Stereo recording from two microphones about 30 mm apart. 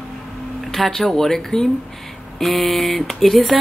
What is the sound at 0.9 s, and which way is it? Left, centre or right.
Speech, centre.